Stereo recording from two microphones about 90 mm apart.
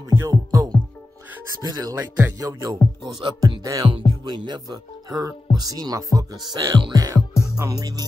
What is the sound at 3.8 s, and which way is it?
Music, 60° right (ahead or behind).